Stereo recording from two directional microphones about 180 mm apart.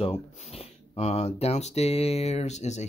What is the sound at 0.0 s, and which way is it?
Speech, 35° left (ahead or behind).